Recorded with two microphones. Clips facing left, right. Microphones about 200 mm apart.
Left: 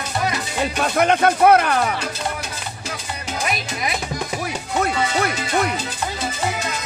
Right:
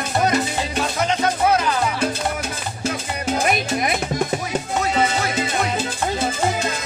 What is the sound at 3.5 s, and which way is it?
Music, 50° right (ahead or behind).